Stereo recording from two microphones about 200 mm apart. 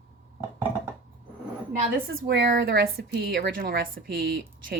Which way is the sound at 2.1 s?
60° right (ahead or behind).